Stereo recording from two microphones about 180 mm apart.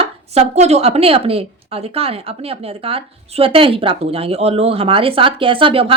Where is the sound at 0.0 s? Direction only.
35° right (ahead or behind).